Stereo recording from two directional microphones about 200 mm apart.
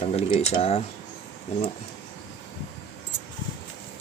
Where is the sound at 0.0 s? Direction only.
30° left (ahead or behind).